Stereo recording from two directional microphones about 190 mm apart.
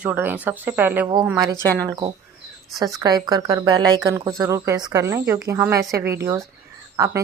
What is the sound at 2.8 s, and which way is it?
Speech, 20° right (ahead or behind).